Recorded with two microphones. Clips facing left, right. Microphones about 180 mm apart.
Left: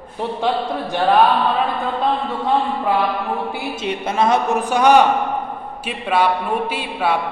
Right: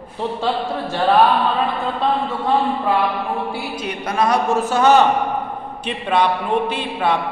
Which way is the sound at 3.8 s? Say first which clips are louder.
Left 2 dB; 25° left (ahead or behind).